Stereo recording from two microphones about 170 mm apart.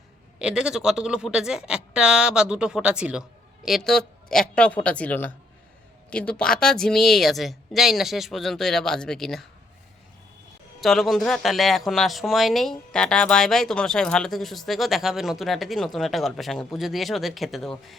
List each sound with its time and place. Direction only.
0.3 s a woman's voice: 5° right (ahead or behind)
10.8 s speech: centre (ahead or behind)